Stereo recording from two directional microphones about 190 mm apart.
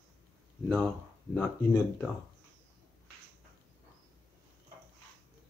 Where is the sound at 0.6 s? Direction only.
5° left (ahead or behind).